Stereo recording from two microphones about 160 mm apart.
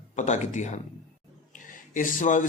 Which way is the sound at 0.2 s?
50° left (ahead or behind).